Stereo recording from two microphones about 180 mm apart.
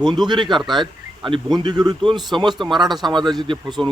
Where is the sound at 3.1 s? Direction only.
25° right (ahead or behind).